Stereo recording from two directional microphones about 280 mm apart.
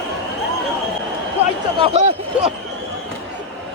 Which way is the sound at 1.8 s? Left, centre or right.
Right.